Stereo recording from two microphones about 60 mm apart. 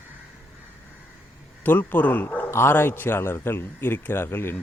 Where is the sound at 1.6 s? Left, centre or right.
Left.